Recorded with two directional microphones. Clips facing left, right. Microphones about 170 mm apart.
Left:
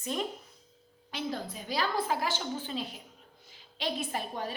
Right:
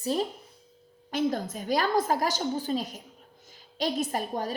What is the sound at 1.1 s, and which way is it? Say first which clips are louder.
A woman's voice: right 8 dB; 45° right (ahead or behind).